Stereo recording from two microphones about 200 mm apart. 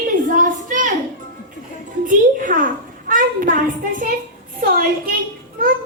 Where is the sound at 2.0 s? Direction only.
40° right (ahead or behind).